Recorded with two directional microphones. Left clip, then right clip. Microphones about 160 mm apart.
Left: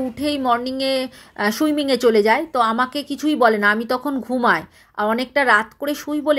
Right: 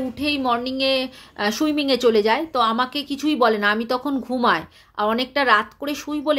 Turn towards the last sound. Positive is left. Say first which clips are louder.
# left 3 dB
turn(degrees=30)  # may be behind; listen again after turning